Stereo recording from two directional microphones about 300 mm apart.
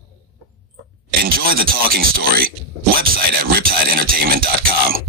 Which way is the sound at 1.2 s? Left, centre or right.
Right.